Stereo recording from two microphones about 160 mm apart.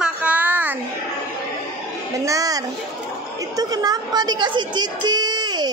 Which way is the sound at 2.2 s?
20° right (ahead or behind).